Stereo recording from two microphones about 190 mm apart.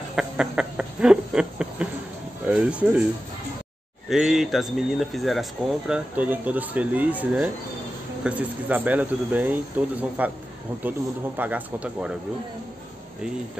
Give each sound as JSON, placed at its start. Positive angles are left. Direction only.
{"t": 0.1, "sound": "a sound", "side_deg": -5}
{"t": 2.4, "sound": "speech", "side_deg": -5}
{"t": 4.1, "sound": "speech", "side_deg": 0}